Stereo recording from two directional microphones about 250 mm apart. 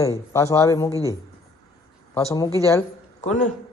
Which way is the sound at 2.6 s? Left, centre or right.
Centre.